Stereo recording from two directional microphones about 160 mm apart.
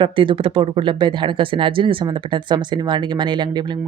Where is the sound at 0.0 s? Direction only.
30° right (ahead or behind).